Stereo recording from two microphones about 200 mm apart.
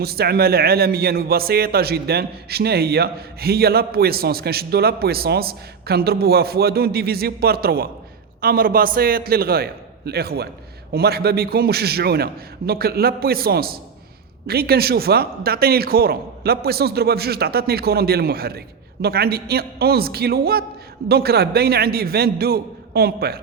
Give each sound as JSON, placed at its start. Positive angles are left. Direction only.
{"t": 0.0, "sound": "a man's voice", "side_deg": -50}